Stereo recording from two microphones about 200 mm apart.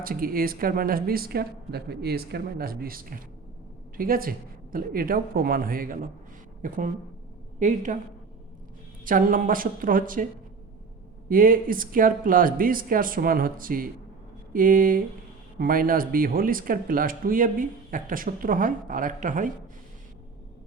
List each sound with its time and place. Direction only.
0.0 s a woman's voice: 45° right (ahead or behind)
9.0 s speech: 45° right (ahead or behind)
11.3 s speech: 45° right (ahead or behind)